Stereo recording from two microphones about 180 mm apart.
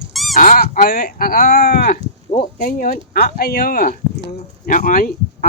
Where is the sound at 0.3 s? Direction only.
50° left (ahead or behind).